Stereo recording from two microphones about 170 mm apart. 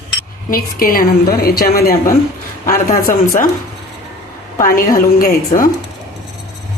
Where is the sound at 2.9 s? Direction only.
50° left (ahead or behind).